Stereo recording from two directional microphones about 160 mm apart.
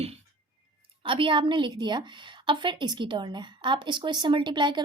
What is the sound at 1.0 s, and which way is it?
A woman's voice, 30° right (ahead or behind).